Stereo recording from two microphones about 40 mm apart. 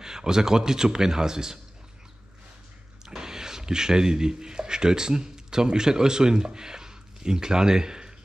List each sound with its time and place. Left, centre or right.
0.0 s a man's voice: centre
3.1 s speech: centre